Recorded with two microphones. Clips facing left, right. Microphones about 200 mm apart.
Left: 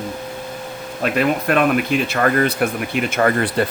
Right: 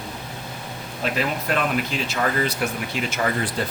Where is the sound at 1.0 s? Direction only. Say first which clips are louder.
Left 7 dB; 60° left (ahead or behind).